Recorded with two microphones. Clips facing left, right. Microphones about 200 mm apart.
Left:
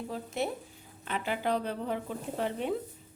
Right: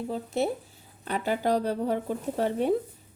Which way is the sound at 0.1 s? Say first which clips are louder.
Right 6 dB; 30° right (ahead or behind).